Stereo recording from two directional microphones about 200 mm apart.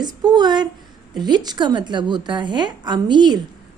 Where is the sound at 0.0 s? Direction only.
20° right (ahead or behind).